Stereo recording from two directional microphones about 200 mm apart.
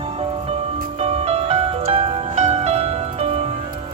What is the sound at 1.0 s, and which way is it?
Music, 30° right (ahead or behind).